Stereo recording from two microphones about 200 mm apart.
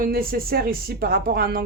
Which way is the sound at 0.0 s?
45° right (ahead or behind).